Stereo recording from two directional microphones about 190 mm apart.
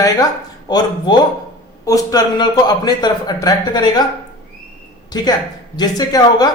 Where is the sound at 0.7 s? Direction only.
20° left (ahead or behind).